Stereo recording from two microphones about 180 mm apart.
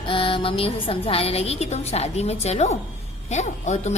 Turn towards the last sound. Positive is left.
turn(degrees=40)  # may be behind; listen again after turning